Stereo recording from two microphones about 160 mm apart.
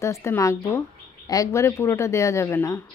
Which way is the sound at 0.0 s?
15° left (ahead or behind).